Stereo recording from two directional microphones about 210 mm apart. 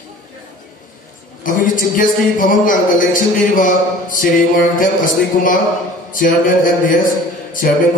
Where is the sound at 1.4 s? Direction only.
40° left (ahead or behind).